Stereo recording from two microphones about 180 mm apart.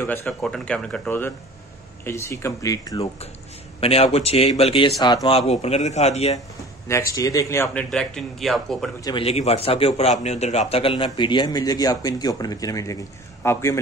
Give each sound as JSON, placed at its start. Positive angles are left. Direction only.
{"t": 0.0, "sound": "speech", "side_deg": 10}
{"t": 3.8, "sound": "a man's voice", "side_deg": 35}
{"t": 5.5, "sound": "speech", "side_deg": 35}
{"t": 6.9, "sound": "speech", "side_deg": 20}
{"t": 7.9, "sound": "a man's voice", "side_deg": 5}
{"t": 9.0, "sound": "a man's voice", "side_deg": 30}